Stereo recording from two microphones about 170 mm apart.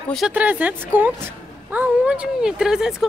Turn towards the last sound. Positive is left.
turn(degrees=-5)  # may be behind; listen again after turning